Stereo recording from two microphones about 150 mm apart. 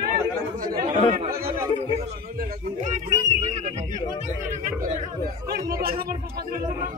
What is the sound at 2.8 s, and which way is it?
Speech, 55° right (ahead or behind).